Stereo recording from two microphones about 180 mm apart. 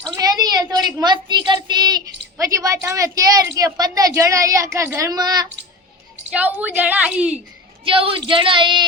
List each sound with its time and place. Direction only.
0.1 s a child's voice: 20° right (ahead or behind)
6.3 s a woman's voice: 10° right (ahead or behind)
7.9 s a woman's voice: 30° right (ahead or behind)